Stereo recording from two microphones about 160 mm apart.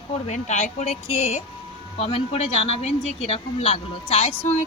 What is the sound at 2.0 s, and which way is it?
Speech, 40° left (ahead or behind).